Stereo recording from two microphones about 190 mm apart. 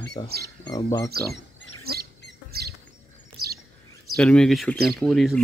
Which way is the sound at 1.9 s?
55° right (ahead or behind).